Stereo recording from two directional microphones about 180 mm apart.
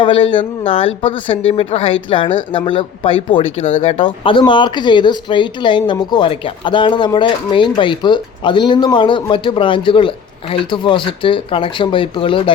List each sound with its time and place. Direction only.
0.0 s speech: 30° left (ahead or behind)